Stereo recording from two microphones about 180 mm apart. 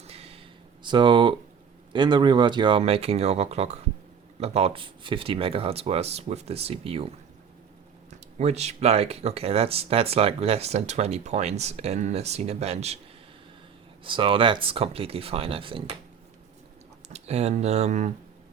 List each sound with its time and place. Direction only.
0.0 s a sound: 35° right (ahead or behind)
0.8 s speech: 25° right (ahead or behind)
8.4 s speech: 40° right (ahead or behind)
14.0 s speech: 30° right (ahead or behind)
17.1 s speech: 35° right (ahead or behind)